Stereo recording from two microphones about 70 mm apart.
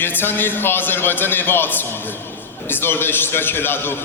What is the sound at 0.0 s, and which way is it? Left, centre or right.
A man's voice, left.